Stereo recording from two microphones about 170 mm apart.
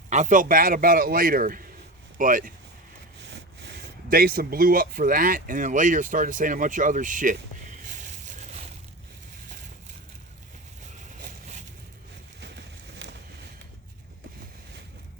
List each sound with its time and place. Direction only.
0.1 s a man's voice: 45° right (ahead or behind)
4.1 s speech: 60° right (ahead or behind)
7.7 s crushing: 50° right (ahead or behind)
12.4 s a sound: 90° right